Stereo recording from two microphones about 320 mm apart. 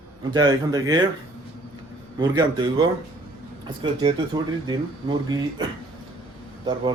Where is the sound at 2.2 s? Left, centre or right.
Centre.